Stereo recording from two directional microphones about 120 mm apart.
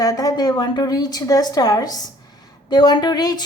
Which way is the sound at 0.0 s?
30° left (ahead or behind).